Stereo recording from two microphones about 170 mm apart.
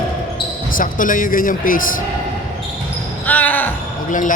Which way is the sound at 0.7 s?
55° left (ahead or behind).